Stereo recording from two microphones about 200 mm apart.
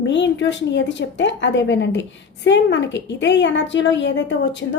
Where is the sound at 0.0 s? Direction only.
65° left (ahead or behind).